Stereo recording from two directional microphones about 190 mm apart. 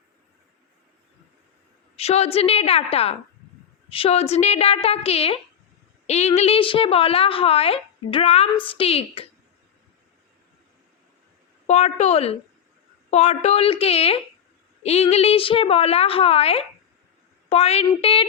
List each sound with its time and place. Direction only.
2.0 s a woman's voice: 35° left (ahead or behind)
11.6 s a woman's voice: 35° left (ahead or behind)